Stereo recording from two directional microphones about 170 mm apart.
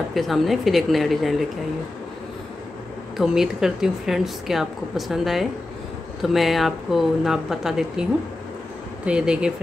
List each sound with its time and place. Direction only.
0.1 s a woman's voice: centre (ahead or behind)
3.2 s a woman's voice: 5° right (ahead or behind)